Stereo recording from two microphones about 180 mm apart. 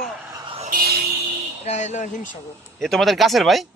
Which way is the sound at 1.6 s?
40° left (ahead or behind).